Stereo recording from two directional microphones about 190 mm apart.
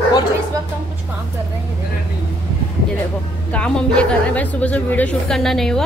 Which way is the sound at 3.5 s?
5° left (ahead or behind).